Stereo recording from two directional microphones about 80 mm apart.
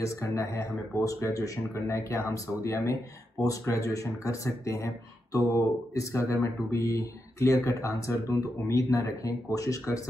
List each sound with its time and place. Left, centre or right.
0.0 s speech: left